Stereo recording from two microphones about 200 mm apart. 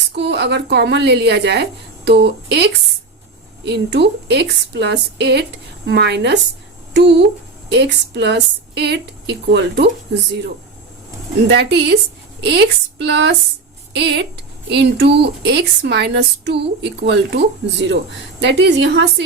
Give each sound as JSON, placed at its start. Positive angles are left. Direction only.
{"t": 0.2, "sound": "a woman's voice", "side_deg": -60}
{"t": 11.4, "sound": "a woman's voice", "side_deg": -60}